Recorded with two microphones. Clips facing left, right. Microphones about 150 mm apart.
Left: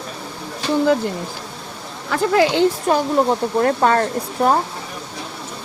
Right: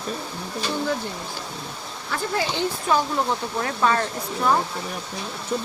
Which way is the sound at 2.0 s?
85° left.